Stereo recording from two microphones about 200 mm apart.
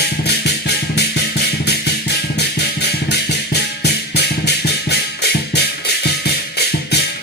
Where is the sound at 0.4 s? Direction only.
55° left (ahead or behind).